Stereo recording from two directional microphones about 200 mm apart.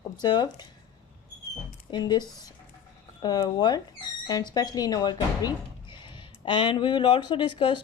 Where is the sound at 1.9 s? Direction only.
20° left (ahead or behind).